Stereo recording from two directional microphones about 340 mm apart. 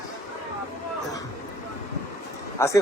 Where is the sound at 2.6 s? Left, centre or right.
Centre.